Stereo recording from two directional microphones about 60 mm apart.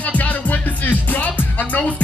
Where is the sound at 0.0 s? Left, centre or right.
Left.